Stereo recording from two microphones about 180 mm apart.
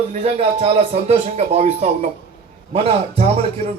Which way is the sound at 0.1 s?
35° right (ahead or behind).